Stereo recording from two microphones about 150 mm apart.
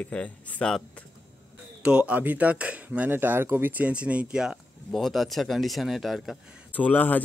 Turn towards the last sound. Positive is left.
turn(degrees=10)  # may be behind; listen again after turning